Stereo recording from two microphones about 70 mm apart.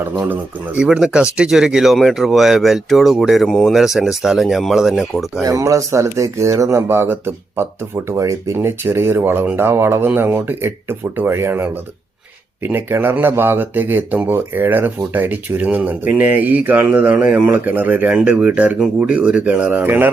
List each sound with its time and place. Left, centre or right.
0.8 s speech: centre
5.4 s speech: right
6.8 s speech: right
8.2 s speech: right
8.5 s speech: right